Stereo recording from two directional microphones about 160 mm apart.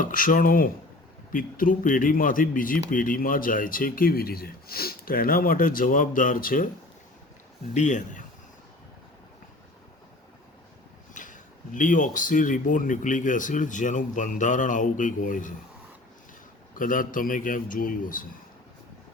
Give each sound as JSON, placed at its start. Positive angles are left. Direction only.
{"t": 0.0, "sound": "speech", "side_deg": 60}
{"t": 7.7, "sound": "speech", "side_deg": 50}
{"t": 11.1, "sound": "speech", "side_deg": 55}
{"t": 16.7, "sound": "speech", "side_deg": 60}